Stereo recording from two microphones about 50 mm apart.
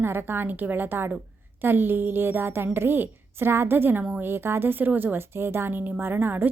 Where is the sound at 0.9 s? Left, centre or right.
Right.